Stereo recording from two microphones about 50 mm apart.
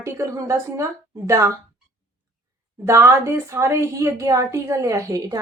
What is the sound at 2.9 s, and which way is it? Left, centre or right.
Speech, right.